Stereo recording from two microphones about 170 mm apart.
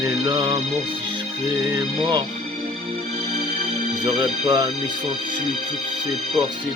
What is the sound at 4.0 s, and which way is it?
Speech, 25° right (ahead or behind).